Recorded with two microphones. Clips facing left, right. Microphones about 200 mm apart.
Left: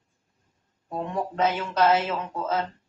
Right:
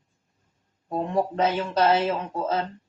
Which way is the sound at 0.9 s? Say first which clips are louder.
Right 3 dB; 30° right (ahead or behind).